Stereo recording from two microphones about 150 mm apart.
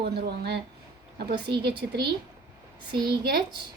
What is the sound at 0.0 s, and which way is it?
Speech, 90° right.